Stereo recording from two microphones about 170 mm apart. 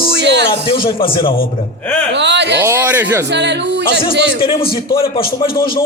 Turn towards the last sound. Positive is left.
turn(degrees=30)  # may be behind; listen again after turning